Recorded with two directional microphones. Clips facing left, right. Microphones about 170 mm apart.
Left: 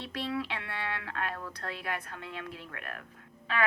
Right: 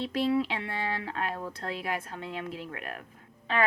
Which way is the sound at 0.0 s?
25° right (ahead or behind).